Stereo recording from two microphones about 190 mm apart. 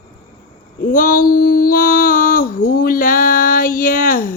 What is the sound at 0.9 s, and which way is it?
Female singing, 45° left (ahead or behind).